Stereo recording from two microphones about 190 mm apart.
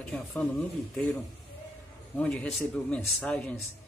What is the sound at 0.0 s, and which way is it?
Speech, 5° left (ahead or behind).